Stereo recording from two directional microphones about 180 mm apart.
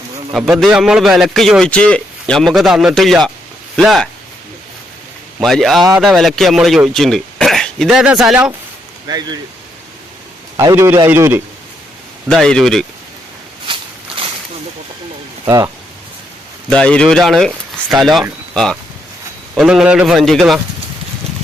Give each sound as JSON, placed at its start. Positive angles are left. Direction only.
{"t": 0.3, "sound": "a man's voice", "side_deg": 0}
{"t": 5.4, "sound": "a man's voice", "side_deg": 0}
{"t": 9.0, "sound": "speech", "side_deg": -20}
{"t": 10.6, "sound": "a man's voice", "side_deg": -15}
{"t": 12.3, "sound": "a man's voice", "side_deg": 5}
{"t": 13.7, "sound": "walk", "side_deg": -25}
{"t": 15.4, "sound": "a man's voice", "side_deg": -20}
{"t": 16.6, "sound": "a man's voice", "side_deg": 5}